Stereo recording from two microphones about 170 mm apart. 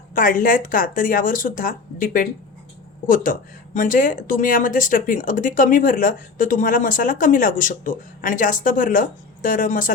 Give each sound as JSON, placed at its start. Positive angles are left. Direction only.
{"t": 0.1, "sound": "speech", "side_deg": 55}
{"t": 3.8, "sound": "speech", "side_deg": 50}